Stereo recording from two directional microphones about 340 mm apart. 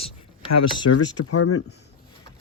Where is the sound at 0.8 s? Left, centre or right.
Left.